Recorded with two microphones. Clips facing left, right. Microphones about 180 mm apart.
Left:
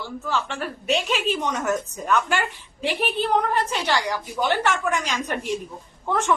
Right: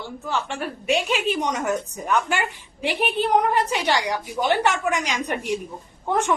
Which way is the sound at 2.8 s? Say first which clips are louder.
Right 1 dB; 15° right (ahead or behind).